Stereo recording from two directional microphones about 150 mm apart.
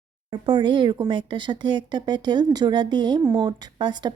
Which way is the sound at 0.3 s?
30° right (ahead or behind).